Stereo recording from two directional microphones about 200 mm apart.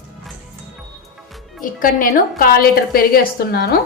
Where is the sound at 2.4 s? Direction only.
45° left (ahead or behind).